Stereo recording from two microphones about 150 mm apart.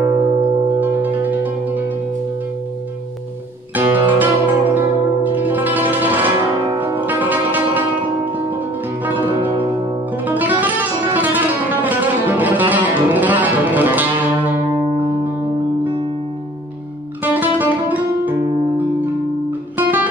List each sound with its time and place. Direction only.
0.0 s singing bowl: 30° right (ahead or behind)
0.7 s music: 10° right (ahead or behind)
3.7 s music: 15° right (ahead or behind)
6.6 s music: 30° right (ahead or behind)
7.0 s music: 10° right (ahead or behind)
10.2 s music: 10° right (ahead or behind)
17.2 s music: 10° right (ahead or behind)
19.8 s music: 10° right (ahead or behind)